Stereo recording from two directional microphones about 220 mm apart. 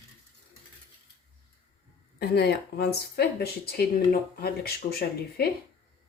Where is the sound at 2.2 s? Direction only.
45° left (ahead or behind).